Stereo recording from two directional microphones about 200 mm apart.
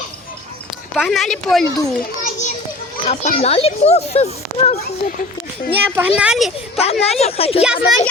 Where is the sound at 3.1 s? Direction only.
30° left (ahead or behind).